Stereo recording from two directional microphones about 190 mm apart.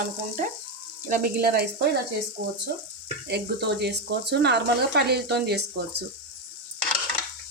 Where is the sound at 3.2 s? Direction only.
60° right (ahead or behind).